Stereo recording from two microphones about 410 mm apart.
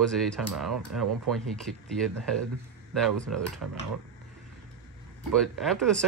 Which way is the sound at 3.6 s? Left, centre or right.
Right.